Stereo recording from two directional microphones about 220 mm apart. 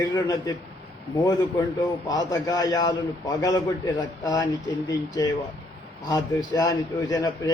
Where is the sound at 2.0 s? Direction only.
15° left (ahead or behind).